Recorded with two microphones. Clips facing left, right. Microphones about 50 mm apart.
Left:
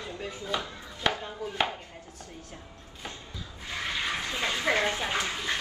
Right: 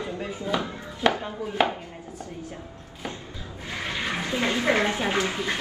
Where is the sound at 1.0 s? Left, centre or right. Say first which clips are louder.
Right 6 dB; centre.